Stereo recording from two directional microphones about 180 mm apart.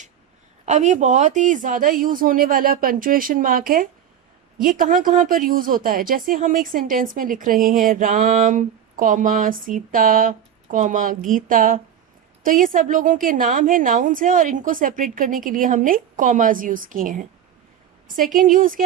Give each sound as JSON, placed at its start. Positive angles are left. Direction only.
{"t": 0.6, "sound": "speech", "side_deg": -40}